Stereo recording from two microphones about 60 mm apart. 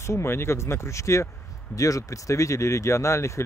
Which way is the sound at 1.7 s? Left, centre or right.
Left.